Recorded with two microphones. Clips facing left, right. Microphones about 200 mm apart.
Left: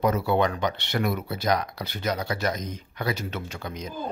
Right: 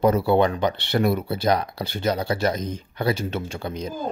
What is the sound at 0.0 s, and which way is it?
Speech, 30° right (ahead or behind).